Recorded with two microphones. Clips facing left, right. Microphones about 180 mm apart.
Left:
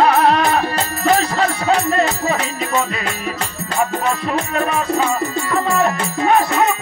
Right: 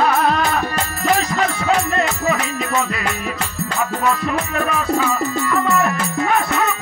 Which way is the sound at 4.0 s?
25° left (ahead or behind).